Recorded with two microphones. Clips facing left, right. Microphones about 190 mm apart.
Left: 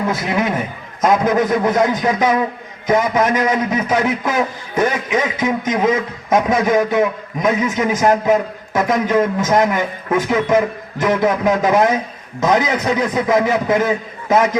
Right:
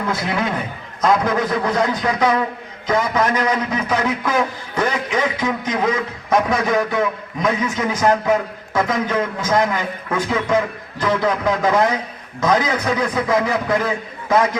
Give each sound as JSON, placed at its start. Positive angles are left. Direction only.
{"t": 0.1, "sound": "a man's voice", "side_deg": 20}